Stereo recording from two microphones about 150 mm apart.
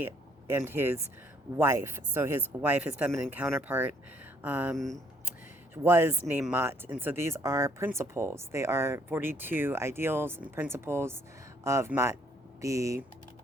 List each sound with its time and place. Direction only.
0.0 s a sound: 15° right (ahead or behind)
0.7 s speech: 15° right (ahead or behind)
4.8 s speech: centre (ahead or behind)
5.7 s speech: 15° right (ahead or behind)